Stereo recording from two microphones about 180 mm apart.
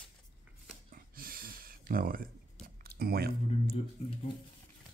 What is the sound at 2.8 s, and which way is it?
Speech, 55° right (ahead or behind).